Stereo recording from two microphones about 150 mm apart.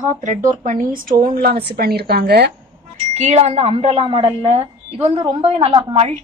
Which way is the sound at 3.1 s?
45° right (ahead or behind).